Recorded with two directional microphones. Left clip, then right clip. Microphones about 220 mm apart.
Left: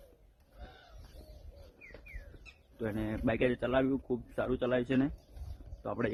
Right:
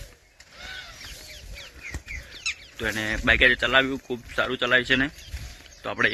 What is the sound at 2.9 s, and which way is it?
Speech, centre (ahead or behind).